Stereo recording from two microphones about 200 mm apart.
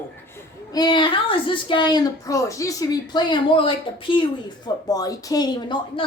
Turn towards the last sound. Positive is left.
turn(degrees=20)  # may be behind; listen again after turning